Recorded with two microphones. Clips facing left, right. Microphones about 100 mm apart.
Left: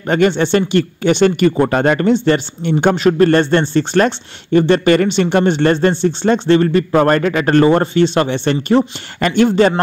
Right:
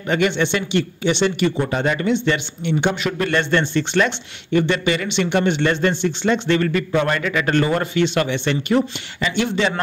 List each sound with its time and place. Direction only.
0.1 s speech: 40° left (ahead or behind)
9.2 s speech: 50° left (ahead or behind)